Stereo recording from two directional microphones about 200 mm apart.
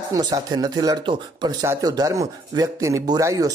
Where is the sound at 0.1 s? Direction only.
20° right (ahead or behind).